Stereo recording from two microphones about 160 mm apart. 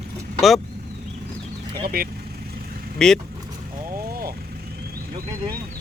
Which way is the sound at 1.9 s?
70° right (ahead or behind).